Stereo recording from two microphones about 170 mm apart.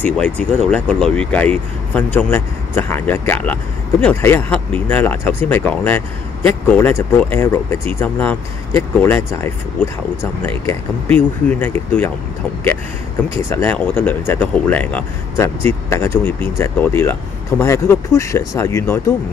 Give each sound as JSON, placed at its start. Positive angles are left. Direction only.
{"t": 0.0, "sound": "speech", "side_deg": 10}
{"t": 13.4, "sound": "speech", "side_deg": 15}